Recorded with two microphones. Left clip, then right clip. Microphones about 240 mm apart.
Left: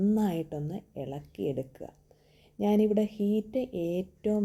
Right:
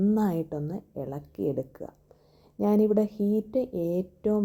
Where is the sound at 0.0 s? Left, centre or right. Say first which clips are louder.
Right 3 dB; centre.